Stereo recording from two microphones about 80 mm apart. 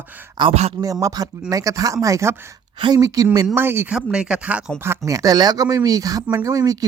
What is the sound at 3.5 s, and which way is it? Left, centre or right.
Speech, right.